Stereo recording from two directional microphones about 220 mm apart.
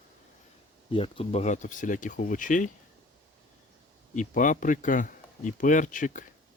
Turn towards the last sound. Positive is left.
turn(degrees=35)  # may be behind; listen again after turning